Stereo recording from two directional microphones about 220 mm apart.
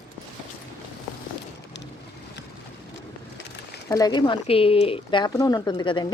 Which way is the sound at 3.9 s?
15° left (ahead or behind).